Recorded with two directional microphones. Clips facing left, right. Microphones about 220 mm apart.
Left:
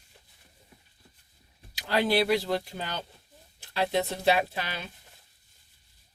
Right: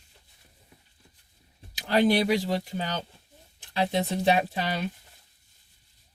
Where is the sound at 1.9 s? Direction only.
15° right (ahead or behind).